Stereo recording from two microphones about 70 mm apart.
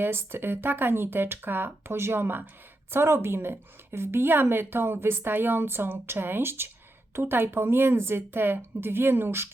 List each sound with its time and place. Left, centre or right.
0.0 s a woman's voice: right